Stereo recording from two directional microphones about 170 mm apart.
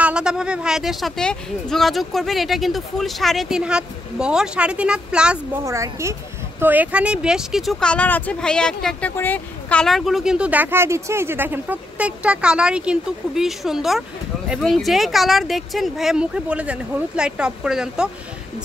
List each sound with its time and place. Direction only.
0.0 s speech: 5° right (ahead or behind)
5.7 s a woman's voice: 15° right (ahead or behind)